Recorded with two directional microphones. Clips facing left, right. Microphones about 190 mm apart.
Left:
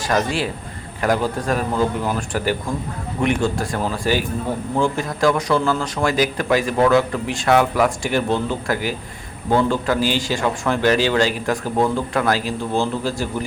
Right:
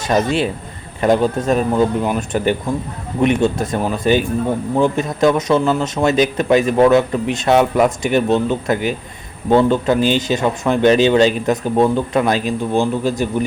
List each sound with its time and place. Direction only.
0.0 s speech: 20° right (ahead or behind)